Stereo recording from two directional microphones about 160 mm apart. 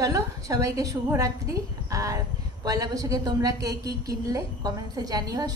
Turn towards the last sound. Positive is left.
turn(degrees=-25)  # may be behind; listen again after turning